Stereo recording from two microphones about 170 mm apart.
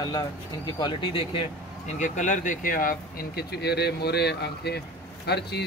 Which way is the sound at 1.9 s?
45° left (ahead or behind).